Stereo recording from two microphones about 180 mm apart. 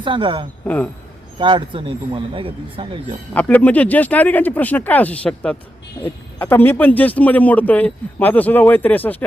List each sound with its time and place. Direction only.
0.0 s speech: 25° right (ahead or behind)
0.6 s speech: 10° left (ahead or behind)
1.4 s speech: 25° right (ahead or behind)
3.3 s speech: 10° left (ahead or behind)